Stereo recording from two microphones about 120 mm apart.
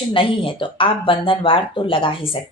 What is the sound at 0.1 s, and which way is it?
A woman's voice, 45° left (ahead or behind).